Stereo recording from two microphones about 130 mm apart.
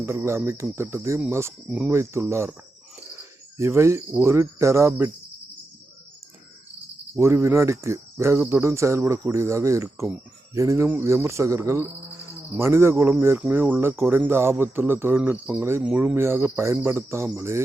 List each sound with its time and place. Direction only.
0.0 s speech: 20° right (ahead or behind)
3.6 s speech: 20° right (ahead or behind)
7.2 s speech: 20° right (ahead or behind)